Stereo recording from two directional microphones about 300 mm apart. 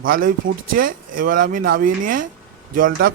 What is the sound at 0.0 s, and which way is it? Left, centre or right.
Speech, right.